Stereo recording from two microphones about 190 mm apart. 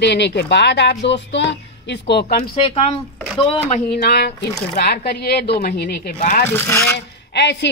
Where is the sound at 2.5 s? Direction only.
30° left (ahead or behind).